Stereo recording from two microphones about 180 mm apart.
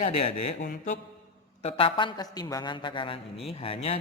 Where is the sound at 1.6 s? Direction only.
30° left (ahead or behind).